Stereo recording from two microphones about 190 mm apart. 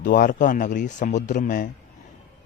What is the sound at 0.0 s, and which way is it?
Speech, 45° left (ahead or behind).